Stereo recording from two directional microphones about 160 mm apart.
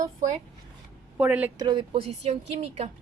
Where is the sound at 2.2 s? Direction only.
40° right (ahead or behind).